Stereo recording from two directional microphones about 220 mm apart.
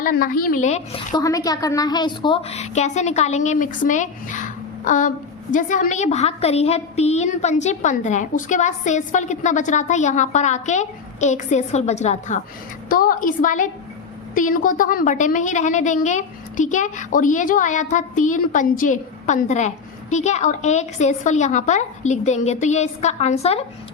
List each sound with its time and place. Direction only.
0.0 s a woman's voice: 40° left (ahead or behind)
1.1 s a woman's voice: 15° left (ahead or behind)